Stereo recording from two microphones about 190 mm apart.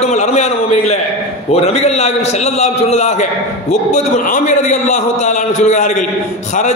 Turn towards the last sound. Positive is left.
turn(degrees=40)  # may be behind; listen again after turning